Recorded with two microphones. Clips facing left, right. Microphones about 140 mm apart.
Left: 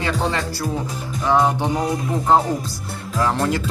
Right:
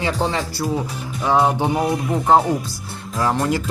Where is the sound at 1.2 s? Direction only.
20° right (ahead or behind).